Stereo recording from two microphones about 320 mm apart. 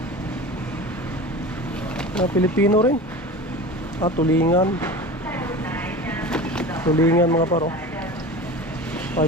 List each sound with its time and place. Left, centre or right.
2.1 s speech: centre
4.3 s speech: centre
5.4 s a sound: centre
9.2 s speech: left